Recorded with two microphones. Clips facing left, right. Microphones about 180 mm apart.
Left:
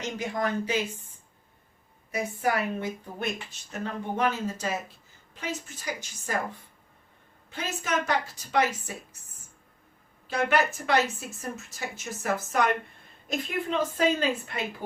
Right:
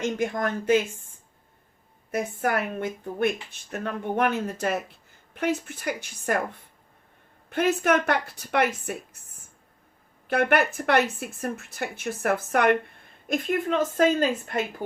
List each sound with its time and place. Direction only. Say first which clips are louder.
0.0 s a woman's voice: right 4 dB; 50° right (ahead or behind)
2.1 s speech: right 2 dB; 55° right (ahead or behind)
7.5 s speech: right 8 dB; 60° right (ahead or behind)
10.2 s a woman's voice: right 3 dB; 60° right (ahead or behind)